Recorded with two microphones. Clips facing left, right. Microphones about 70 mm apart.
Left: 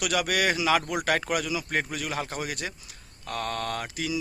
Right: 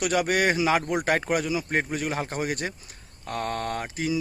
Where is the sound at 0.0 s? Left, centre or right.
Right.